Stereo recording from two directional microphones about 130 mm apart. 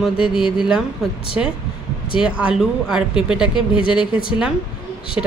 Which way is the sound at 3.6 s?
40° left (ahead or behind).